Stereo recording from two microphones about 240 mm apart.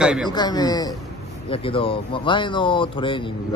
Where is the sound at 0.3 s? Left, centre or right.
Centre.